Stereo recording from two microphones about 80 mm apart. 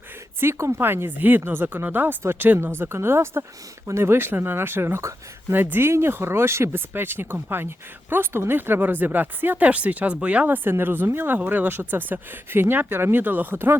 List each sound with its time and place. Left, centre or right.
0.3 s speech: right